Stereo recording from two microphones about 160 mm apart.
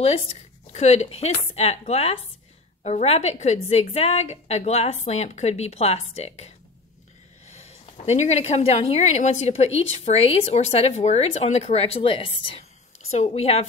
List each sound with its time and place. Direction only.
0.0 s a woman's voice: 40° left (ahead or behind)
7.5 s speech: 40° left (ahead or behind)